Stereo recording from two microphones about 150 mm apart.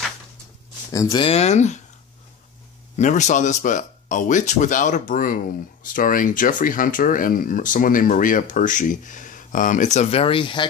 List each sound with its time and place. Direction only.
1.1 s speech: 40° left (ahead or behind)
3.0 s speech: 55° left (ahead or behind); by 10.7 s 35° left (ahead or behind)